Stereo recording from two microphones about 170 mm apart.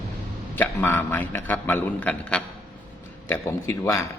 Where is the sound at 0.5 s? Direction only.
10° left (ahead or behind).